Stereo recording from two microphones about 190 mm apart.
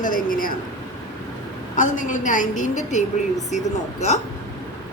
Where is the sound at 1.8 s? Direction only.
45° left (ahead or behind).